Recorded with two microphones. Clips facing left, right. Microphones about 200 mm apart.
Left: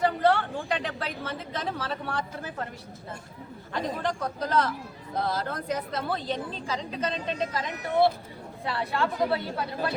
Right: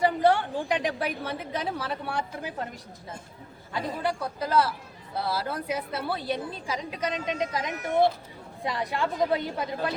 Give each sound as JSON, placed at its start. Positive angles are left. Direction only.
{"t": 0.0, "sound": "a woman's voice", "side_deg": -15}
{"t": 3.7, "sound": "a woman's voice", "side_deg": -10}